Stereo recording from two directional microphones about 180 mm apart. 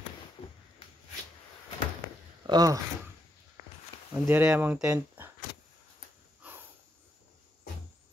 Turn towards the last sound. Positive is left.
turn(degrees=-10)  # may be behind; listen again after turning